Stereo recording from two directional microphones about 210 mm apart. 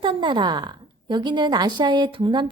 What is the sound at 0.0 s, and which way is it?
Speech, 25° right (ahead or behind).